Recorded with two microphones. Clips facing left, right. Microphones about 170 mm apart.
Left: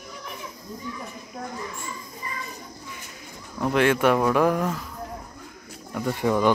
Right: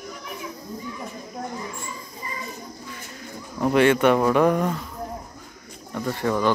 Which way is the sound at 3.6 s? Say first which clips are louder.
Right 3 dB; centre (ahead or behind).